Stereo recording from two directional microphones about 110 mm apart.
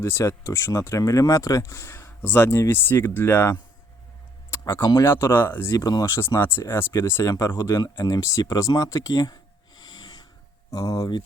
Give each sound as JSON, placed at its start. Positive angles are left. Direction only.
{"t": 0.0, "sound": "speech", "side_deg": 25}
{"t": 4.5, "sound": "a sound", "side_deg": 25}
{"t": 4.9, "sound": "speech", "side_deg": 25}